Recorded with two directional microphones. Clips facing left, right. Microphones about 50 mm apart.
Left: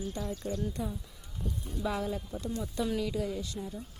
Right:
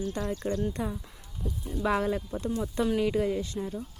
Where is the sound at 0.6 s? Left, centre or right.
Right.